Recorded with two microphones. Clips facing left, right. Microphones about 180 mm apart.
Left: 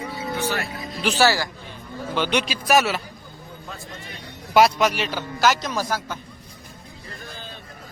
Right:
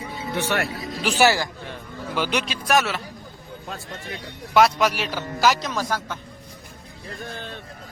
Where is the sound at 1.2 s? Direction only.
20° right (ahead or behind).